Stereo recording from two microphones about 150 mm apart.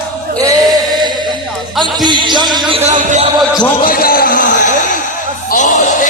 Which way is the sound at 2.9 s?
55° right (ahead or behind).